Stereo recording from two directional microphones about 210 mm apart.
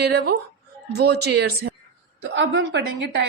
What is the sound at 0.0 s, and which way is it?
A woman's voice, 50° right (ahead or behind).